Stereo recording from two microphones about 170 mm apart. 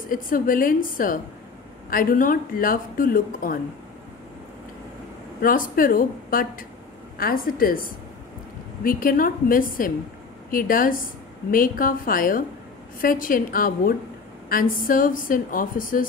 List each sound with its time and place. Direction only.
0.1 s speech: 55° left (ahead or behind)
5.4 s speech: 55° left (ahead or behind)
8.8 s speech: 55° left (ahead or behind)